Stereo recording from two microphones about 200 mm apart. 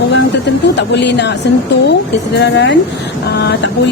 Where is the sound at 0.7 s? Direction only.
60° left (ahead or behind).